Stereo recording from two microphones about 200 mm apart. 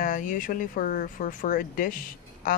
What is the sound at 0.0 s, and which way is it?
A man's voice, 40° left (ahead or behind).